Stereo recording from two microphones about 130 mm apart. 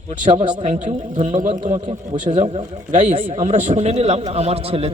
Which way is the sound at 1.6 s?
50° right (ahead or behind).